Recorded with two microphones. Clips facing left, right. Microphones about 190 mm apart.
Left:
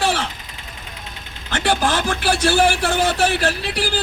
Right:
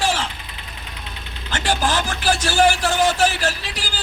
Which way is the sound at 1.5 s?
60° left (ahead or behind).